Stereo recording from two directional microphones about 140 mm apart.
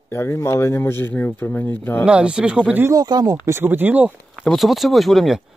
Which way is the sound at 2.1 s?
10° right (ahead or behind).